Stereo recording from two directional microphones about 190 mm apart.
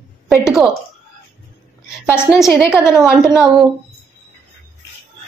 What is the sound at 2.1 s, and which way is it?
A woman's voice, 5° right (ahead or behind).